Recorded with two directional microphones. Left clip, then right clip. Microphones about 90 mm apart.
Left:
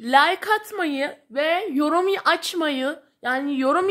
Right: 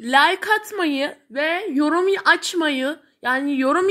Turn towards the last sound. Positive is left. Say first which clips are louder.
# right 2 dB
turn(degrees=15)  # may be behind; listen again after turning